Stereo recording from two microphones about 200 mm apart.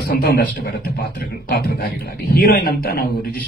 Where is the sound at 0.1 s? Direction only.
50° left (ahead or behind).